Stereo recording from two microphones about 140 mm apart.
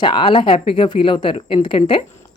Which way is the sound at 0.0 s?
35° left (ahead or behind).